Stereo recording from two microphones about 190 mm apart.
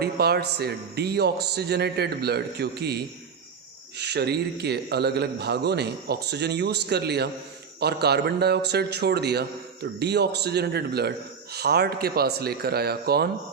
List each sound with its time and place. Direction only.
0.0 s a man's voice: 55° right (ahead or behind)